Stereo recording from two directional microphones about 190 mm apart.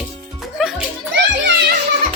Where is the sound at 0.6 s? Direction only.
Centre (ahead or behind).